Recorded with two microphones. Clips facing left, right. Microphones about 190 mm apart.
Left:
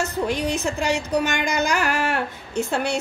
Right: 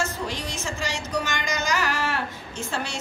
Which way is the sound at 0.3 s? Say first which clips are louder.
Left 8 dB; 60° left (ahead or behind).